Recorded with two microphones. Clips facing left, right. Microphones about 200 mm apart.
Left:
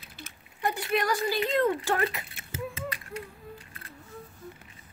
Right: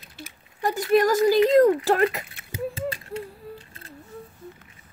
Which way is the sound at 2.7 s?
30° right (ahead or behind).